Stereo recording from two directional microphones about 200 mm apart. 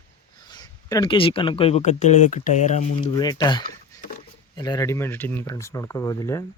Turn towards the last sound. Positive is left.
turn(degrees=15)  # may be behind; listen again after turning